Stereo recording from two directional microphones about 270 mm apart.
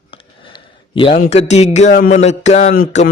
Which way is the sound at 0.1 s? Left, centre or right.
Centre.